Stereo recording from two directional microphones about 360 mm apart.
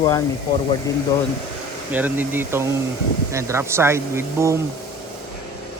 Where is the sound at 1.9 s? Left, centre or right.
Centre.